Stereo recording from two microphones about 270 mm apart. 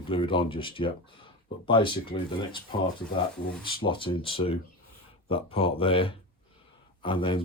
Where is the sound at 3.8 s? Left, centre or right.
Centre.